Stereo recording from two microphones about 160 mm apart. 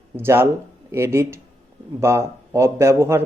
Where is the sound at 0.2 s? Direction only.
15° right (ahead or behind).